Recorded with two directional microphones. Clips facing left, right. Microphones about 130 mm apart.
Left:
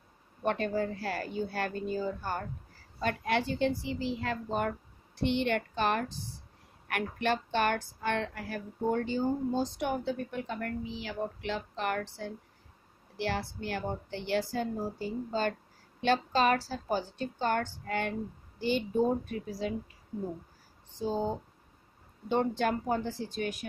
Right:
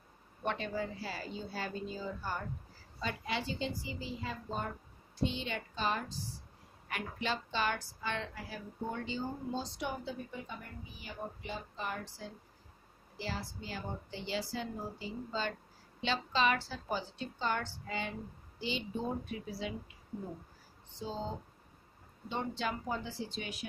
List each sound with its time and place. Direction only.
0.5 s a woman's voice: 50° left (ahead or behind)
21.0 s a woman's voice: 50° left (ahead or behind)
22.3 s a woman's voice: 55° left (ahead or behind)